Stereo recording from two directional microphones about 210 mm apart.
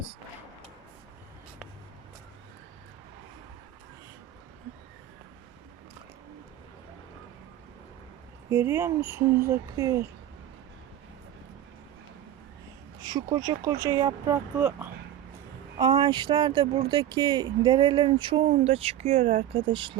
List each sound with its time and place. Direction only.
8.4 s speech: 10° right (ahead or behind)
13.0 s a sound: 20° right (ahead or behind)
13.3 s speech: 15° right (ahead or behind)
15.8 s speech: 20° right (ahead or behind)